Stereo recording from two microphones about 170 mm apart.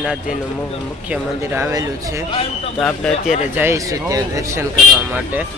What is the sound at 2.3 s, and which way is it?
Speech, 35° left (ahead or behind).